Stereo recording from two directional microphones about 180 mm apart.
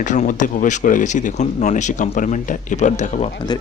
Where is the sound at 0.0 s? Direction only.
45° left (ahead or behind).